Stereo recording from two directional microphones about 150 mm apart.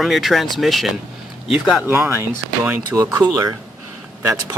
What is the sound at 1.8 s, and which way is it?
Speech, 15° right (ahead or behind).